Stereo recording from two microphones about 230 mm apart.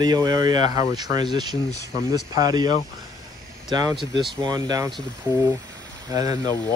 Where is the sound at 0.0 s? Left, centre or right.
Centre.